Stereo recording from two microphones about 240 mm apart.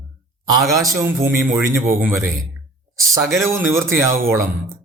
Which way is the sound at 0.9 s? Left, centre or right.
Centre.